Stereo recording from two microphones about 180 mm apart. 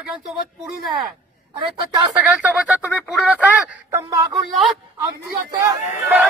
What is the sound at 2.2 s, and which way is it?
A man's voice, 5° right (ahead or behind).